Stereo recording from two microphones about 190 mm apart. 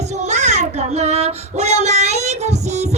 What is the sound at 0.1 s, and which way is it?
Child singing, 40° right (ahead or behind).